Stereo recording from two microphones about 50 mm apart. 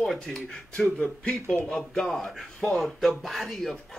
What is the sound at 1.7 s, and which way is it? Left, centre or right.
Speech, centre.